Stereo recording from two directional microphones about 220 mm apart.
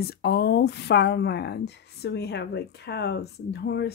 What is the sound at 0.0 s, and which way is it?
Speech, 45° left (ahead or behind).